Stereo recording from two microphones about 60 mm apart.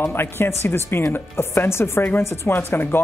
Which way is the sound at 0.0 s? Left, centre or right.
Left.